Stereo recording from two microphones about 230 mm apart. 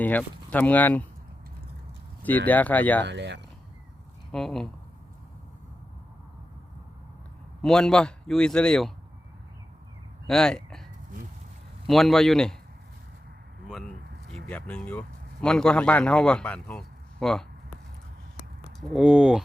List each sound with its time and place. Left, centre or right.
0.0 s speech: centre
2.5 s speech: centre
3.0 s speech: right
4.3 s a man's voice: centre
7.6 s a man's voice: centre
10.2 s speech: centre
11.9 s a man's voice: centre
14.3 s speech: centre
18.8 s a man's voice: centre